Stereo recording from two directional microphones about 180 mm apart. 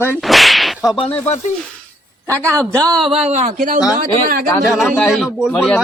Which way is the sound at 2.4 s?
20° right (ahead or behind).